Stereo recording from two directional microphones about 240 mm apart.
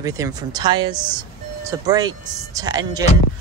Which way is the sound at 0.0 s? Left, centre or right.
Centre.